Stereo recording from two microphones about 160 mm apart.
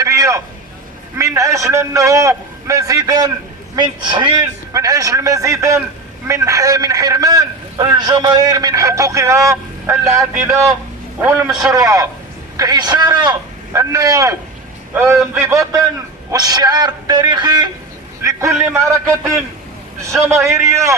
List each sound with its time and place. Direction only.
0.0 s vehicle: 20° right (ahead or behind)
1.1 s a man's voice: 20° right (ahead or behind)
18.2 s vehicle: 20° right (ahead or behind)
18.8 s a man's voice: 20° right (ahead or behind)